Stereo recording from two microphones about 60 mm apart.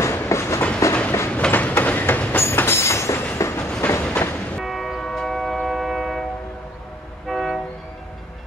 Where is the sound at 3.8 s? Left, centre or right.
Left.